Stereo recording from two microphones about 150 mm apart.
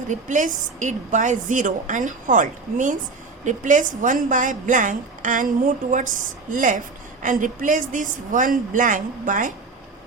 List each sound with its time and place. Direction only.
0.1 s a woman's voice: 55° right (ahead or behind)